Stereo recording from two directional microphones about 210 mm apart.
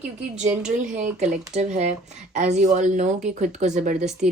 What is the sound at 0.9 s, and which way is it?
Speech, 35° right (ahead or behind).